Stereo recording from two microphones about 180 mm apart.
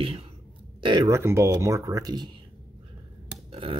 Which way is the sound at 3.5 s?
30° right (ahead or behind).